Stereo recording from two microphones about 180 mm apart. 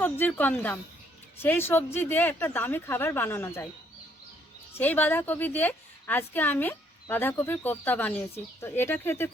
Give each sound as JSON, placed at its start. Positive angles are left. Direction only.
{"t": 0.0, "sound": "a woman's voice", "side_deg": 10}
{"t": 4.8, "sound": "a woman's voice", "side_deg": 10}